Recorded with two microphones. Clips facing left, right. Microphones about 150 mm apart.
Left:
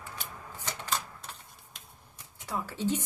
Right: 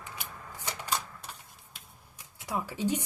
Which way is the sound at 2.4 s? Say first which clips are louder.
Right 1 dB; 15° right (ahead or behind).